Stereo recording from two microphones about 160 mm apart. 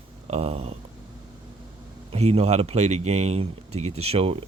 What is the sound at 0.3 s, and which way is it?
Speech, 40° right (ahead or behind).